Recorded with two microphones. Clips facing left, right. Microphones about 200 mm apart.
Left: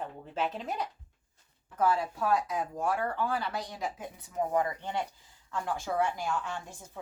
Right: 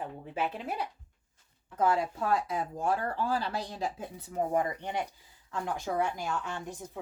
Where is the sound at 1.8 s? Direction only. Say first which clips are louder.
Even; 25° right (ahead or behind).